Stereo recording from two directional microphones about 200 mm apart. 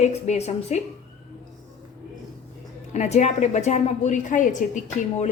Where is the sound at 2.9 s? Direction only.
35° left (ahead or behind).